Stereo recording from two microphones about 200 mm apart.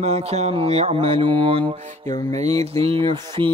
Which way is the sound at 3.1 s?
25° right (ahead or behind).